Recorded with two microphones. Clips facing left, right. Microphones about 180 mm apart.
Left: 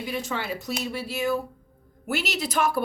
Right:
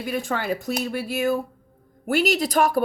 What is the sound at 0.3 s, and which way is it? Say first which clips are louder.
A woman's voice: right 5 dB; 45° right (ahead or behind).